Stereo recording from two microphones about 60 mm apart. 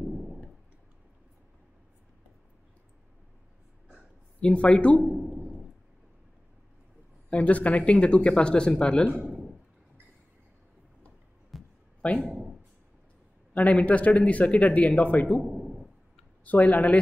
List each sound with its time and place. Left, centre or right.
4.4 s speech: centre
5.0 s a man's voice: centre
7.2 s speech: centre
9.1 s a man's voice: right
11.5 s a sound: centre
13.5 s speech: left
15.4 s a sound: centre
16.4 s speech: left